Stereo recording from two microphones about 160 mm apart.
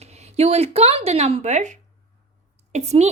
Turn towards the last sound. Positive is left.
turn(degrees=-45)  # may be behind; listen again after turning